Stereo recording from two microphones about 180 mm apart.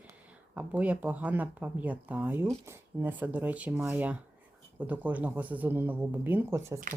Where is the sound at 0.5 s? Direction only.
10° right (ahead or behind).